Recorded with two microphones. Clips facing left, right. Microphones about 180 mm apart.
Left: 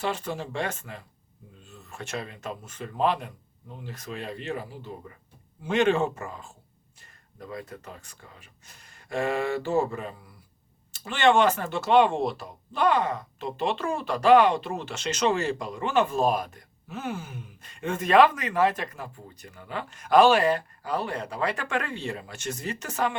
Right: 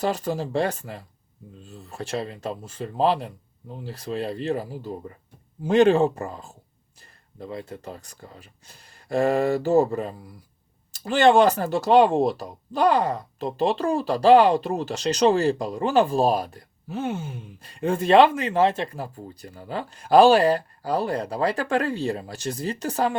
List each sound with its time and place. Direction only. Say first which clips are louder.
0.0 s speech: right 5 dB; 40° right (ahead or behind)